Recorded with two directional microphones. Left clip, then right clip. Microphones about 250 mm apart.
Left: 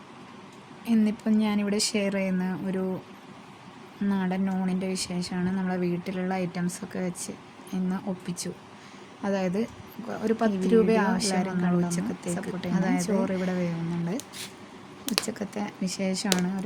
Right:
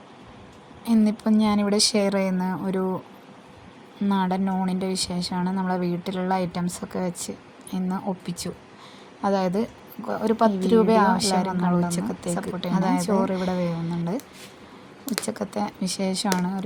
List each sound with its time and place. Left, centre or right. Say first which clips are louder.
0.9 s a woman's voice: right 4 dB; centre
4.1 s a woman's voice: right 6 dB; centre
15.3 s a woman's voice: right 5 dB; centre